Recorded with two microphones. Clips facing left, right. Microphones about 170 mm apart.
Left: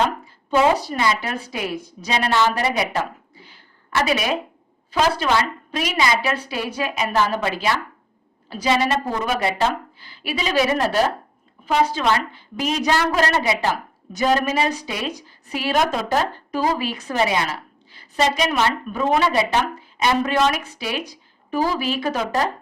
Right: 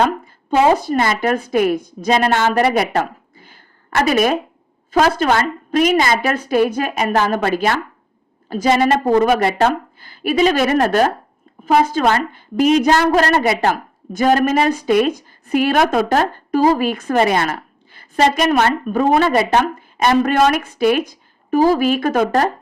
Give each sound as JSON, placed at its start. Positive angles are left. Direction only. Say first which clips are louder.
{"t": 0.8, "sound": "a woman's voice", "louder": "right 5 dB", "side_deg": -50}